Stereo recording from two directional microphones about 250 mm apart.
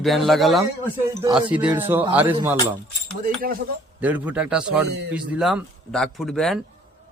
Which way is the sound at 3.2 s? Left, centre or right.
Right.